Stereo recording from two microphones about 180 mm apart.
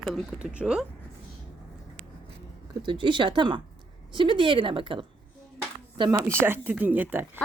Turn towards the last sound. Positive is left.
turn(degrees=-10)  # may be behind; listen again after turning